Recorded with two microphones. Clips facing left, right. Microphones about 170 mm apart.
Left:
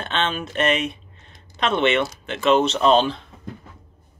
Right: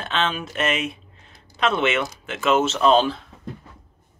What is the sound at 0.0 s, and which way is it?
Speech, centre (ahead or behind).